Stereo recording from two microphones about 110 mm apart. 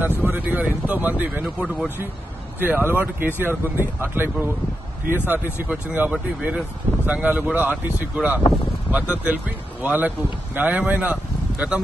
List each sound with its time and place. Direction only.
0.2 s speech: 15° right (ahead or behind)
2.6 s speech: 15° right (ahead or behind)